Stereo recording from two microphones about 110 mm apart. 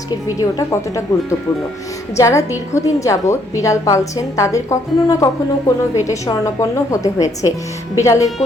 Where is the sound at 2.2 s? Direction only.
25° left (ahead or behind).